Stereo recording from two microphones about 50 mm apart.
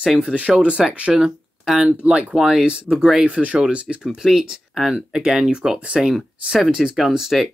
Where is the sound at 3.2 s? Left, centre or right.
Right.